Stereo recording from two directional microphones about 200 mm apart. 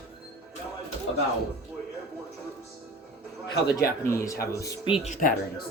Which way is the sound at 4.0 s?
15° left (ahead or behind).